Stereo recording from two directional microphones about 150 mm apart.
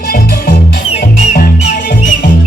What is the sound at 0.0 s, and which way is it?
Music, 70° left (ahead or behind).